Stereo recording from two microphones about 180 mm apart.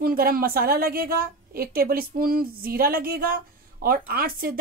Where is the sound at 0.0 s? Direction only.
55° right (ahead or behind).